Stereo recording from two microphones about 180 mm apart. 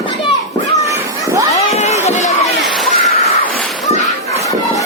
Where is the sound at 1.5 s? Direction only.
40° left (ahead or behind).